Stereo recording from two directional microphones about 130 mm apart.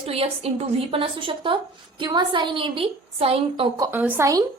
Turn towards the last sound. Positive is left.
turn(degrees=-25)  # may be behind; listen again after turning